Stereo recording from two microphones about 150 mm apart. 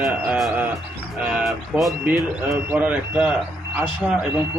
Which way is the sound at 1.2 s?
5° right (ahead or behind).